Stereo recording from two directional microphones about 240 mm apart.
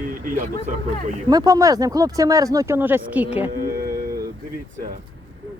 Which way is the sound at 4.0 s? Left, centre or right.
Right.